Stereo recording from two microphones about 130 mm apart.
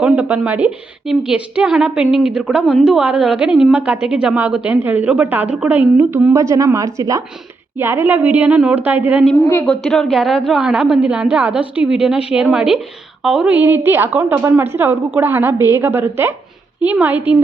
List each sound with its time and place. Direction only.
0.0 s a woman's voice: 10° right (ahead or behind)
9.5 s speech: 15° left (ahead or behind)
9.8 s a woman's voice: centre (ahead or behind)